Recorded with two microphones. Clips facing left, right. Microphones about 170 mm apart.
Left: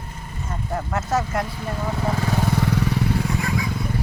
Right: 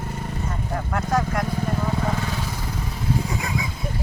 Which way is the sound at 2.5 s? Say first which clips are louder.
Left 10 dB; 70° left (ahead or behind).